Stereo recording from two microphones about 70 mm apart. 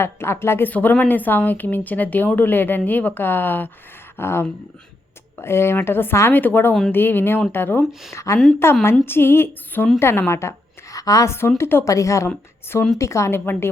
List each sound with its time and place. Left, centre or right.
0.0 s a woman's voice: left
8.1 s a woman's voice: left
10.9 s a sound: left
11.3 s a woman's voice: left
11.9 s speech: left
13.4 s a woman's voice: left